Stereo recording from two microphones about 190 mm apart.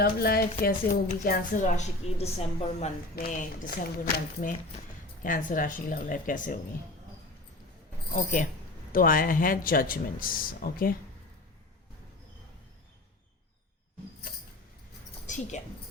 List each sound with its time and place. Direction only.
0.0 s a woman's voice: 55° left (ahead or behind); by 2.9 s 35° left (ahead or behind)
3.2 s speech: 50° left (ahead or behind)
8.1 s speech: 45° left (ahead or behind)
15.3 s a woman's voice: 40° left (ahead or behind)